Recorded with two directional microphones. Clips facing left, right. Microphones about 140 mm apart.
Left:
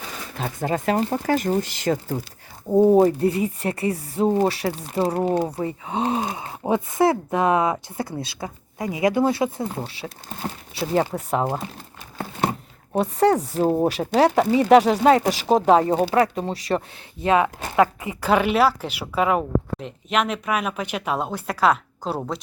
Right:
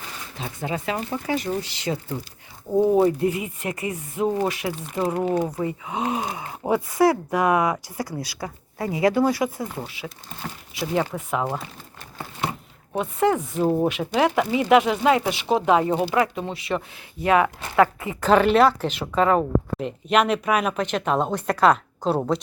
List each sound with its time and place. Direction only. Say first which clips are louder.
0.3 s speech: left 4 dB; 50° left (ahead or behind)
2.6 s speech: left 4 dB; 15° left (ahead or behind)
3.0 s speech: left 2 dB; 35° left (ahead or behind)
13.0 s speech: left 3 dB; 35° left (ahead or behind)
17.2 s speech: even; 20° left (ahead or behind)
19.4 s speech: right 2 dB; centre (ahead or behind)